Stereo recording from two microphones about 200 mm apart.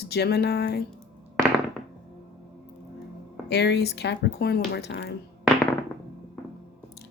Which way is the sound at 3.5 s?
55° left (ahead or behind).